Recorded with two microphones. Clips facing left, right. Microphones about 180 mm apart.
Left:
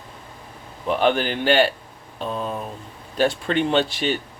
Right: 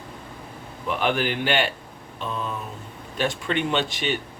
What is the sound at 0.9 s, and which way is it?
Speech, 35° left (ahead or behind).